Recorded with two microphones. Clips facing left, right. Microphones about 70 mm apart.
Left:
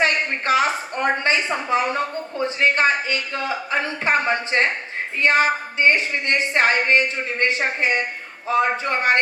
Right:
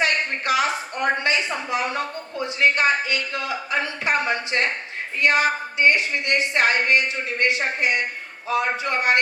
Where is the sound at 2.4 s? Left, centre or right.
Left.